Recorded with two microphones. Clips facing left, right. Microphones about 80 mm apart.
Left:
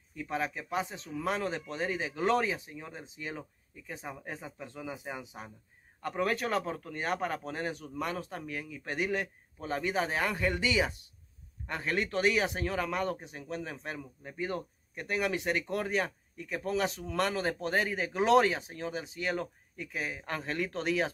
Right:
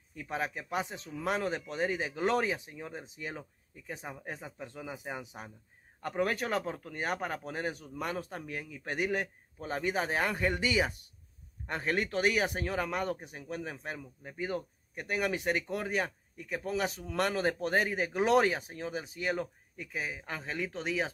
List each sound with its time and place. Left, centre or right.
0.1 s a man's voice: right
4.1 s speech: centre
4.8 s a man's voice: centre
6.0 s a man's voice: right
15.1 s a man's voice: right
15.7 s speech: centre
17.1 s a man's voice: right; by 20.9 s centre